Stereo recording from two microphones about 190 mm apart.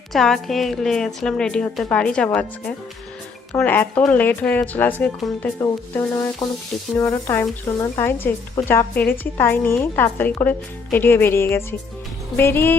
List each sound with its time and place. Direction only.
0.1 s a woman's voice: centre (ahead or behind)
5.5 s stir: 20° left (ahead or behind)
6.9 s speech: 10° left (ahead or behind)